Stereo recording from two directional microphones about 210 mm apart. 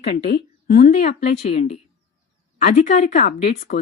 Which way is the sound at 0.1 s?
50° left (ahead or behind).